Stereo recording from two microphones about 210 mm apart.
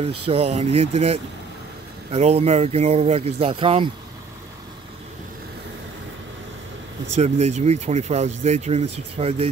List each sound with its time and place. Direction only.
0.3 s speech: 30° right (ahead or behind)
7.2 s speech: 30° right (ahead or behind)